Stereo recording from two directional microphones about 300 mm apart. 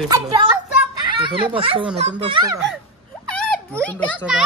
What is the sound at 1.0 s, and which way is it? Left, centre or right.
Speech, centre.